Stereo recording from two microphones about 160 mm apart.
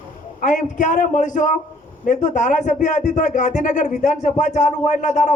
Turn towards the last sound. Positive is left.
turn(degrees=50)  # may be behind; listen again after turning